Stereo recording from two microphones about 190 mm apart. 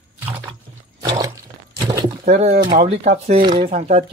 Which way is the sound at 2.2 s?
35° right (ahead or behind).